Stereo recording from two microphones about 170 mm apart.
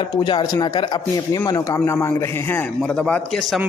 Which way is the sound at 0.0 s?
25° left (ahead or behind).